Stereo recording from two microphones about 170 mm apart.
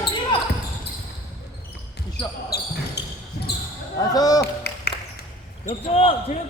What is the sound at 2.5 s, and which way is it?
Basketball bounce, 65° left (ahead or behind).